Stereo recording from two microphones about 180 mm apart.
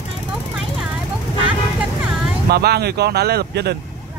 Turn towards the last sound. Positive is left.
turn(degrees=-65)  # may be behind; listen again after turning